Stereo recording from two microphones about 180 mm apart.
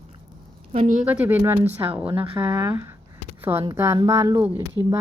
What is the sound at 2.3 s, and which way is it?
Speech, 10° right (ahead or behind).